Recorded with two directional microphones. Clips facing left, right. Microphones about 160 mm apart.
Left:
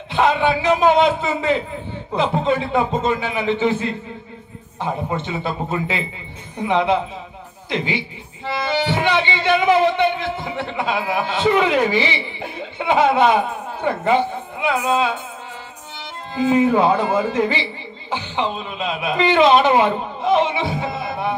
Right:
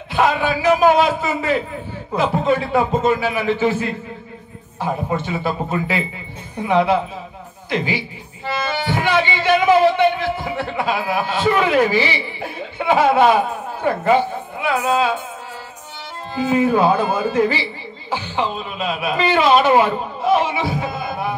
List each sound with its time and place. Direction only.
0.1 s speech: 25° left (ahead or behind)
16.3 s speech: 20° left (ahead or behind)